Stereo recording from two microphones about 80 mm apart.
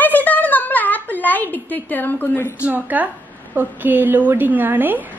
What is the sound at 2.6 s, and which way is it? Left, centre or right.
A woman's voice, right.